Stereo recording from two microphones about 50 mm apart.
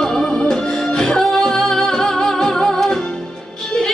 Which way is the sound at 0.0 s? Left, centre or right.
Centre.